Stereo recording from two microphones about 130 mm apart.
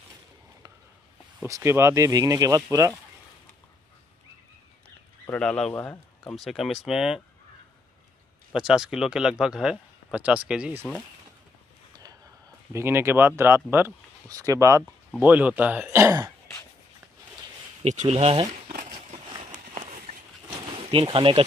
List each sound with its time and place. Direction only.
1.4 s speech: 20° right (ahead or behind)
5.4 s speech: 5° left (ahead or behind)
8.5 s speech: 5° right (ahead or behind)
11.9 s a sound: 30° right (ahead or behind)
12.7 s speech: 20° right (ahead or behind)
15.1 s speech: 10° right (ahead or behind)
17.8 s speech: 60° right (ahead or behind)
19.1 s a sound: 40° right (ahead or behind)
19.5 s run: 65° right (ahead or behind)
20.5 s a sound: 40° right (ahead or behind)